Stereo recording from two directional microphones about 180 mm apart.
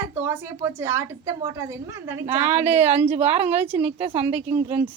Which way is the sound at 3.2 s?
35° right (ahead or behind).